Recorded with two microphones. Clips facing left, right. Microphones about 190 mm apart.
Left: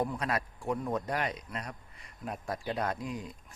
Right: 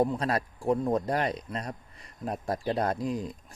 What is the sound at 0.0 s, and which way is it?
Speech, 30° right (ahead or behind).